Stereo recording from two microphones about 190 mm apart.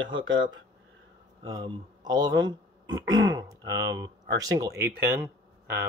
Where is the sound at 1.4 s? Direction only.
20° right (ahead or behind).